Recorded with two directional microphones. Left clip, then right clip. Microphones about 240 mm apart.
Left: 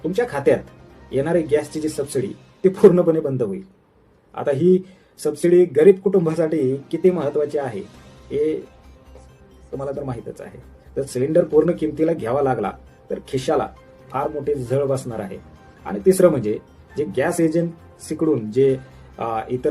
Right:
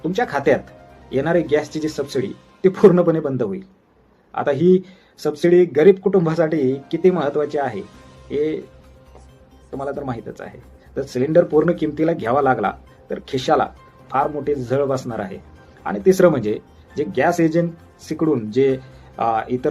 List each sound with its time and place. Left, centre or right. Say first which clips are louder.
0.1 s speech: right 1 dB; centre
9.9 s speech: right 1 dB; centre